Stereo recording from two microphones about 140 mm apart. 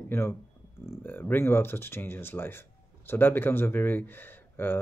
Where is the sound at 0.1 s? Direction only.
15° left (ahead or behind).